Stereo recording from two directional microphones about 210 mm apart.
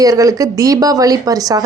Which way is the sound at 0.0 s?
15° right (ahead or behind).